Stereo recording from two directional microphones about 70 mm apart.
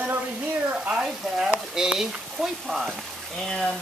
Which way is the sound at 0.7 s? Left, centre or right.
Centre.